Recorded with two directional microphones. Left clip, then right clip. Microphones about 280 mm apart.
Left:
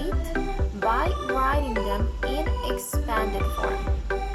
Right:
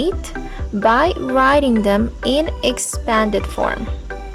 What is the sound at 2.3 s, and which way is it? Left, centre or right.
Speech, right.